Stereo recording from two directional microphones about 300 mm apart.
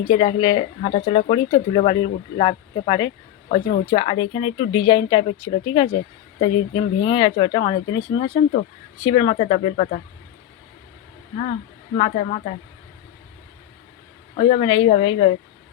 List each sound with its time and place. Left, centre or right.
0.0 s speech: centre
11.9 s a woman's voice: centre
14.3 s a woman's voice: centre